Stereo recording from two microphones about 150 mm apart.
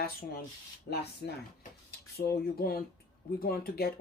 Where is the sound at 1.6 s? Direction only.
90° left.